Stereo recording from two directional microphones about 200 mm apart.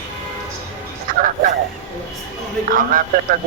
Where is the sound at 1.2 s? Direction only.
40° right (ahead or behind).